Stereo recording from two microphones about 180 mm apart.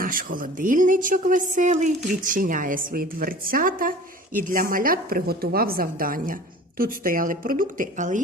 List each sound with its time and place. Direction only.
0.0 s speech: 50° right (ahead or behind)